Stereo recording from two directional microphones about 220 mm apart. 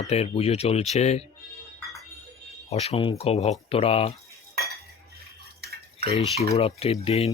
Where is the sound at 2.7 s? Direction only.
30° left (ahead or behind).